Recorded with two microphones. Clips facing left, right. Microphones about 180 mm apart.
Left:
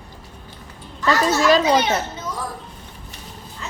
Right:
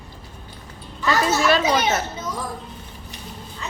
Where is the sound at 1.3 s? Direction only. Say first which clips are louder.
Left 5 dB; 30° left (ahead or behind).